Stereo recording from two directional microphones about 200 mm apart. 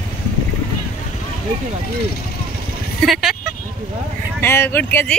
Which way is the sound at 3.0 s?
Centre (ahead or behind).